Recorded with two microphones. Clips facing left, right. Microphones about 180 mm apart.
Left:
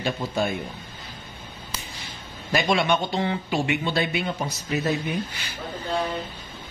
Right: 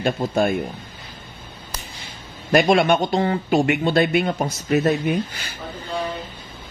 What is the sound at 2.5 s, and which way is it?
A man's voice, 50° right (ahead or behind).